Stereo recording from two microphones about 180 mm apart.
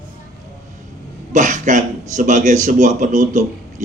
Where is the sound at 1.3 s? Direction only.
45° right (ahead or behind).